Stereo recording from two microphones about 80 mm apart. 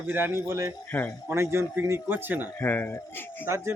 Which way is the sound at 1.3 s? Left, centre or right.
Right.